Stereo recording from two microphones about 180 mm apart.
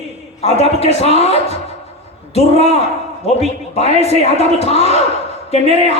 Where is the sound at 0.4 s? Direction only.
35° left (ahead or behind).